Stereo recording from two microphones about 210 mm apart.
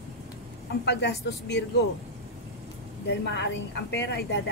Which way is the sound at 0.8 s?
55° left (ahead or behind).